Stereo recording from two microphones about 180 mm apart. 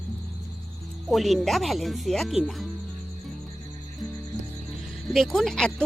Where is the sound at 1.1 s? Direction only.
Centre (ahead or behind).